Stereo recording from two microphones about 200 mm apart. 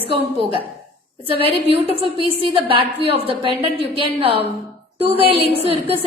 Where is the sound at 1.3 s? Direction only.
25° right (ahead or behind).